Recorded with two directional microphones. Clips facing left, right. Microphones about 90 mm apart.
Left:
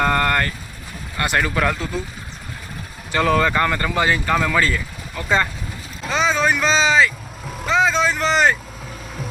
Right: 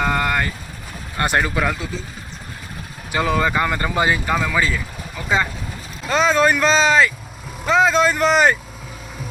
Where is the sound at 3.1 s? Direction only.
10° right (ahead or behind).